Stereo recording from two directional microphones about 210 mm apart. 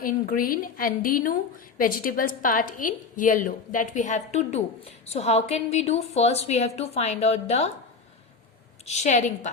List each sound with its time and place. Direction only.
0.0 s a woman's voice: 45° left (ahead or behind)
8.9 s a woman's voice: 35° left (ahead or behind)